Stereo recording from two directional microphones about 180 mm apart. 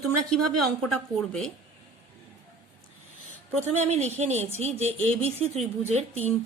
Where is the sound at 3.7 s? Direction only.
40° right (ahead or behind).